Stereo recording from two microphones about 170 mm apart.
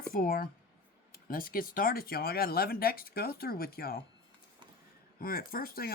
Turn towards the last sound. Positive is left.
turn(degrees=60)  # may be behind; listen again after turning